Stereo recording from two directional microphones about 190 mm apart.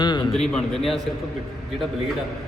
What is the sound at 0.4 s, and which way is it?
Speech, 5° left (ahead or behind).